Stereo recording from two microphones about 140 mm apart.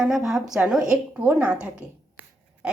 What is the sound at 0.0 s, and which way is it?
A woman's voice, 5° right (ahead or behind).